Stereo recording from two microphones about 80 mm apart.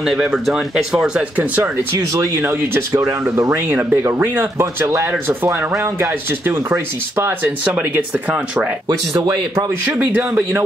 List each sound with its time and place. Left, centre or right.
0.0 s speech: centre
2.0 s speech: right
3.0 s speech: right
8.8 s speech: right
9.9 s speech: centre